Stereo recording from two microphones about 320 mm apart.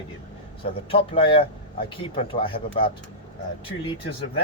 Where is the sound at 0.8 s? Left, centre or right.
Centre.